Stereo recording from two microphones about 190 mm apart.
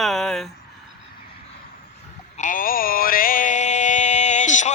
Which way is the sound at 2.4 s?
45° left (ahead or behind).